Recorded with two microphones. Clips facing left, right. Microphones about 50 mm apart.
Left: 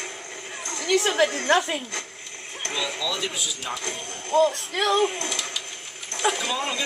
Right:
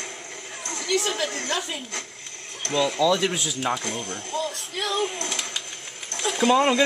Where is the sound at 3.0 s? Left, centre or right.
Right.